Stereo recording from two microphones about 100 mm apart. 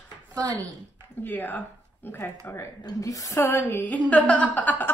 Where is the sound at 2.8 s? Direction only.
35° left (ahead or behind); by 4.9 s 20° left (ahead or behind).